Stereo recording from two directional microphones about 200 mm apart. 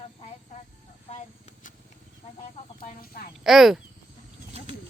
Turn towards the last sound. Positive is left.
turn(degrees=0)  # may be behind; listen again after turning